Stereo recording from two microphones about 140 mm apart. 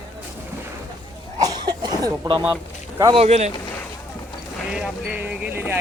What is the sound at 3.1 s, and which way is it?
Speech, 50° right (ahead or behind).